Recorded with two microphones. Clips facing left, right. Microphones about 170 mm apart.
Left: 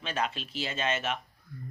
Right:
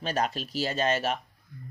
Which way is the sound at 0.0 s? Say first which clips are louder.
Right 4 dB; 40° right (ahead or behind).